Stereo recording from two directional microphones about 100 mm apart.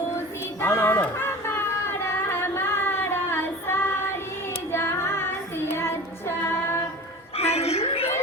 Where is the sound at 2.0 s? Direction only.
25° left (ahead or behind).